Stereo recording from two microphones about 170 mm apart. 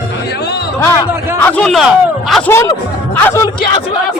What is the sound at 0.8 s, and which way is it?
Speech, 15° left (ahead or behind).